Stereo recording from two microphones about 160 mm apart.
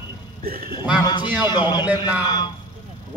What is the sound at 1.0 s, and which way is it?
A man's voice, 25° left (ahead or behind).